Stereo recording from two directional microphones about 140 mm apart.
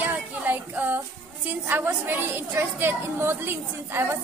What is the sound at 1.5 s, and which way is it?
A woman's voice, 15° right (ahead or behind).